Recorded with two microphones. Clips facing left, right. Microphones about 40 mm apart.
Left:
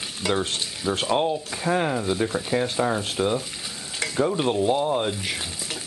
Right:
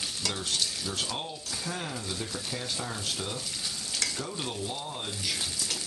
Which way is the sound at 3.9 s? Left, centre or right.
Left.